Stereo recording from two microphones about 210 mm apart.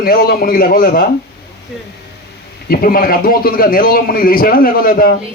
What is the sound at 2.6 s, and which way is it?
Speech, 45° left (ahead or behind).